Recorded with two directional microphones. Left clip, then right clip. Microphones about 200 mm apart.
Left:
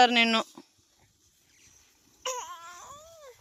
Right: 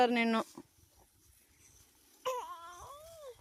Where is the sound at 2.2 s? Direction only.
15° right (ahead or behind).